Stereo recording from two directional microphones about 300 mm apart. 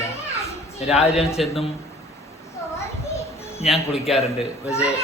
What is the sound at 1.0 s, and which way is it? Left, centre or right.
Speech, left.